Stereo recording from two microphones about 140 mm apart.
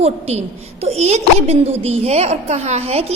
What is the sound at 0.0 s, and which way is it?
A woman's voice, 50° right (ahead or behind).